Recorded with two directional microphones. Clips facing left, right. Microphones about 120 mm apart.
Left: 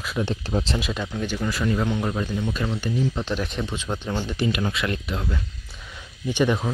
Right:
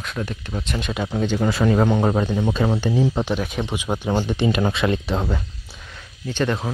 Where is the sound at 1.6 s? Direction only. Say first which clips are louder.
Right 6 dB; 55° right (ahead or behind).